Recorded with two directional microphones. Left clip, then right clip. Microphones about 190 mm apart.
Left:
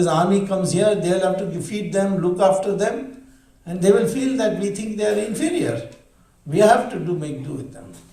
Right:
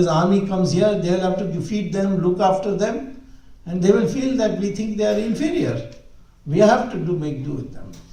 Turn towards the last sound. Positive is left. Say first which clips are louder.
# right 1 dB
turn(degrees=45)  # may be behind; listen again after turning